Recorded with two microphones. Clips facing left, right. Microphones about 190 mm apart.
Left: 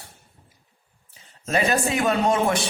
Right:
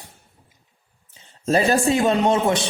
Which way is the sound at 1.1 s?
30° right (ahead or behind).